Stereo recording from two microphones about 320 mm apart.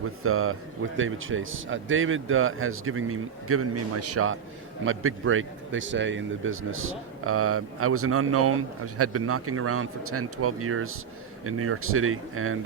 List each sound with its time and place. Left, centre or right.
0.2 s speech: right